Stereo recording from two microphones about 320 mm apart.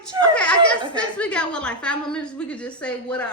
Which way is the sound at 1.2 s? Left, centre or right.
Centre.